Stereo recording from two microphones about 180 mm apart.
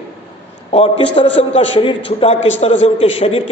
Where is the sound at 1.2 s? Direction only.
30° left (ahead or behind).